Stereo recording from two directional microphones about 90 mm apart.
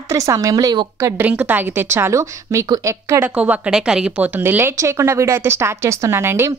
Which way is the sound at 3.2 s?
15° right (ahead or behind).